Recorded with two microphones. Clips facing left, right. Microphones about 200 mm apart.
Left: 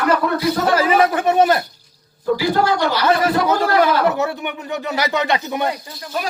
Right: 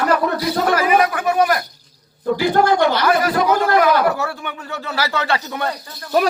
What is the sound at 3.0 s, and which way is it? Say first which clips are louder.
Speech: even; 25° left (ahead or behind).